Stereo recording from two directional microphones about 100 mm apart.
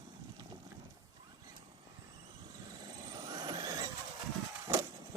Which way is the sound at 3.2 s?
40° right (ahead or behind).